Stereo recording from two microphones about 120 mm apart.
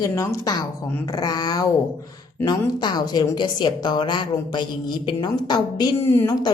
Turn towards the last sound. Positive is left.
turn(degrees=30)  # may be behind; listen again after turning